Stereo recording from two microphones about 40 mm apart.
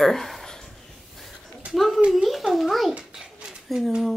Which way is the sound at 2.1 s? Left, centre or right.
Centre.